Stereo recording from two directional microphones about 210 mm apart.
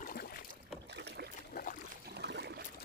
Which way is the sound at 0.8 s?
55° right (ahead or behind).